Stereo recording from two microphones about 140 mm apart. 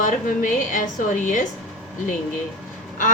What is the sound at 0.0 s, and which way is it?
A woman's voice, 70° left (ahead or behind).